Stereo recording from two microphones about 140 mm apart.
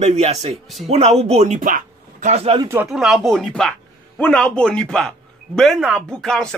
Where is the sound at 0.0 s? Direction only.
55° right (ahead or behind); by 2.3 s 70° right (ahead or behind).